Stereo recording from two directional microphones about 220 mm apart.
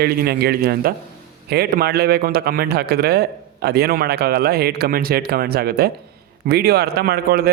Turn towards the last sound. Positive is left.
turn(degrees=-45)  # may be behind; listen again after turning